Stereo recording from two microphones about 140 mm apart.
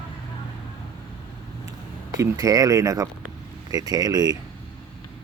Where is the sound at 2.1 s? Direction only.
25° right (ahead or behind).